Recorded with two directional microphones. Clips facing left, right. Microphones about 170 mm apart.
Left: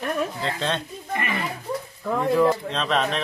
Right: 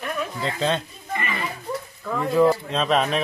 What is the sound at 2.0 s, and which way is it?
Speech, 30° left (ahead or behind).